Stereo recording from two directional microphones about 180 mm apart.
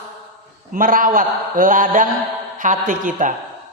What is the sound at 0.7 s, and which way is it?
A man's voice, 50° right (ahead or behind).